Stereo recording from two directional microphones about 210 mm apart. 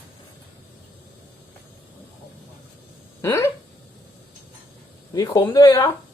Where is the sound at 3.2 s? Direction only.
15° left (ahead or behind).